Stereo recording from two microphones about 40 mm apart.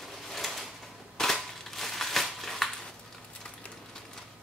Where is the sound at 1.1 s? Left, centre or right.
Centre.